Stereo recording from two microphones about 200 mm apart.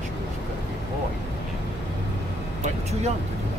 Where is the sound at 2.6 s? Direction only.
35° right (ahead or behind).